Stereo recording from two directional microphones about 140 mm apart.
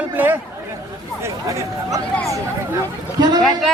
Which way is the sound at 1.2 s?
20° right (ahead or behind).